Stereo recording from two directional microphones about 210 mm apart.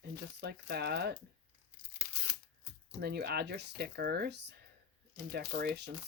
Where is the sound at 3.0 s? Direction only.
50° right (ahead or behind).